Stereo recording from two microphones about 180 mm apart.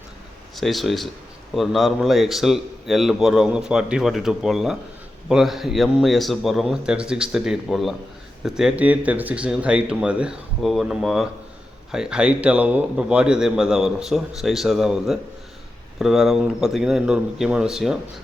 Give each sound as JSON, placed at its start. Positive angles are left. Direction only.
{"t": 0.5, "sound": "a man's voice", "side_deg": 0}